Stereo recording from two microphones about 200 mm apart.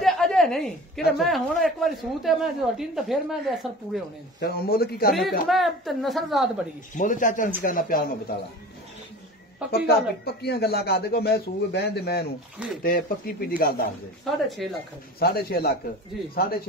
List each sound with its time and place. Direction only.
0.0 s speech: centre (ahead or behind)
4.4 s speech: 50° left (ahead or behind)
5.5 s speech: centre (ahead or behind)
7.0 s speech: 40° left (ahead or behind)
9.7 s speech: 50° left (ahead or behind)
12.6 s speech: 5° right (ahead or behind)
13.6 s speech: 50° left (ahead or behind)
14.2 s speech: centre (ahead or behind)
15.1 s speech: 50° left (ahead or behind)